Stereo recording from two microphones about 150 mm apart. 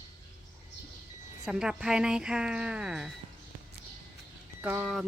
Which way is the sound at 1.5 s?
5° right (ahead or behind).